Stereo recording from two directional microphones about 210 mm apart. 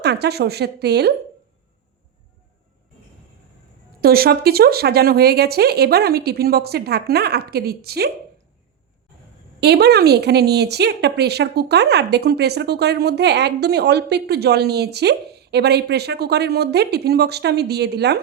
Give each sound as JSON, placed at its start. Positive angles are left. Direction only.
{"t": 0.0, "sound": "speech", "side_deg": -50}
{"t": 4.0, "sound": "speech", "side_deg": -45}
{"t": 9.6, "sound": "speech", "side_deg": -50}